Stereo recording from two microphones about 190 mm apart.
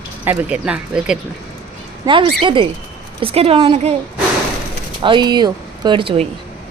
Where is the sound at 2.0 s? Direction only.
25° right (ahead or behind).